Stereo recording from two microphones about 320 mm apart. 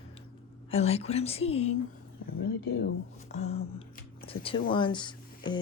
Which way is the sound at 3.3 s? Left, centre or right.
Left.